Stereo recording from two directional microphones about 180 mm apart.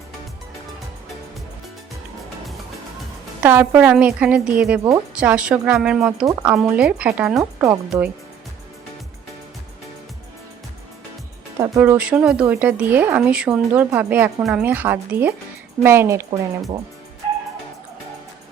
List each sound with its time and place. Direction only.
3.4 s speech: 10° right (ahead or behind)
11.6 s speech: 15° right (ahead or behind)